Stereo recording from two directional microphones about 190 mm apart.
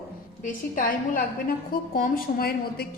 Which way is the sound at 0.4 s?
45° left (ahead or behind).